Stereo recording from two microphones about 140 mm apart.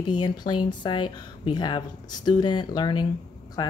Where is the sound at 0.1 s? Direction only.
30° left (ahead or behind).